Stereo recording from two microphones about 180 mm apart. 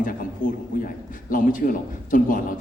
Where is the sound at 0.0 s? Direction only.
50° left (ahead or behind).